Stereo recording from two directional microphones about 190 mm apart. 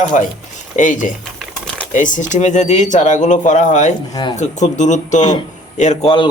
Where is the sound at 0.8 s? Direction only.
40° left (ahead or behind).